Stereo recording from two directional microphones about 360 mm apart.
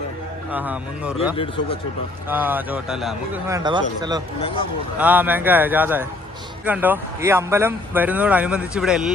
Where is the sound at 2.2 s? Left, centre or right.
Centre.